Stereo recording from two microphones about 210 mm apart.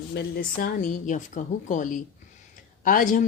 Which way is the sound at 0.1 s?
45° left (ahead or behind).